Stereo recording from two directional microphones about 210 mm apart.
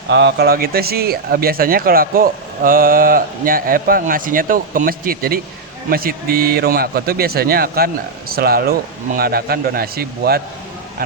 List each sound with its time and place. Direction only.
0.1 s speech: 55° right (ahead or behind)